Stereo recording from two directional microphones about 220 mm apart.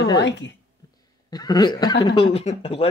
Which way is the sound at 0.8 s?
15° left (ahead or behind).